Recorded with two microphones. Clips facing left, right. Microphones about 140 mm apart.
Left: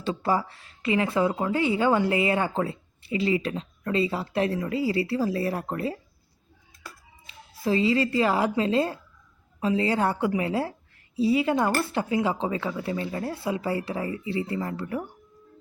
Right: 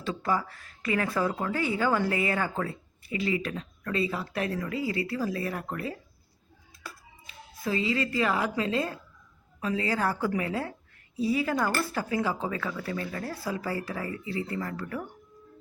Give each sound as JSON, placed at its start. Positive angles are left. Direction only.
{"t": 0.0, "sound": "speech", "side_deg": 30}
{"t": 7.6, "sound": "speech", "side_deg": 30}